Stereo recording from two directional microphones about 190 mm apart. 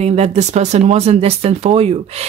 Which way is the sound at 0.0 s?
35° right (ahead or behind).